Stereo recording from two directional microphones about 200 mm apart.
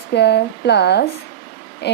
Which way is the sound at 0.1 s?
55° left (ahead or behind).